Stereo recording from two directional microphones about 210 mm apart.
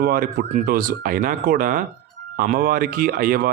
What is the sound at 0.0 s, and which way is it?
Speech, 45° right (ahead or behind).